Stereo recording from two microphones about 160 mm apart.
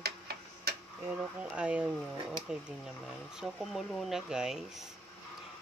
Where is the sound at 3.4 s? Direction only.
Centre (ahead or behind).